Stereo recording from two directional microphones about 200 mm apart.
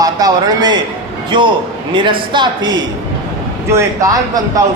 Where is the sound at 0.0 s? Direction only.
20° right (ahead or behind).